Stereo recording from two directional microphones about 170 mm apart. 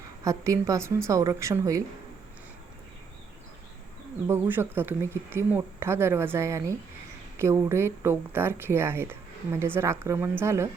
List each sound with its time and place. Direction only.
0.3 s a woman's voice: 20° right (ahead or behind)
4.3 s speech: 15° right (ahead or behind)